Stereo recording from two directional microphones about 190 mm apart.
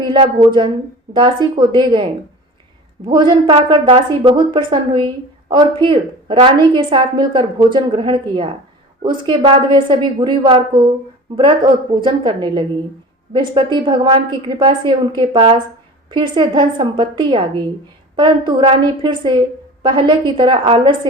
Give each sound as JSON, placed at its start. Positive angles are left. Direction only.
{"t": 0.0, "sound": "a sound", "side_deg": -25}
{"t": 1.1, "sound": "a woman's voice", "side_deg": -25}
{"t": 3.1, "sound": "a woman's voice", "side_deg": -25}